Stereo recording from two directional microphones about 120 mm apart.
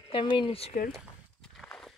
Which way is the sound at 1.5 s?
5° left (ahead or behind).